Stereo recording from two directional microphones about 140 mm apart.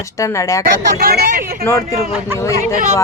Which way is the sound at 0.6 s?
90° right.